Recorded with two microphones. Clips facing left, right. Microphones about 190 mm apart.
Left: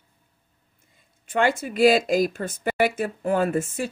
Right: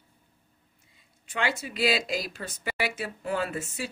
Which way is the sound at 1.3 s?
50° left (ahead or behind).